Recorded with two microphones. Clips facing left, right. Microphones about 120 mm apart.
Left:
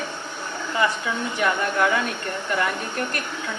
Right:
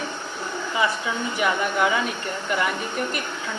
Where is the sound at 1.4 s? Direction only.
5° right (ahead or behind).